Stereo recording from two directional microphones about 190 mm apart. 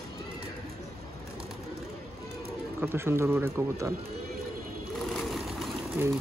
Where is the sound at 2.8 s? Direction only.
10° right (ahead or behind).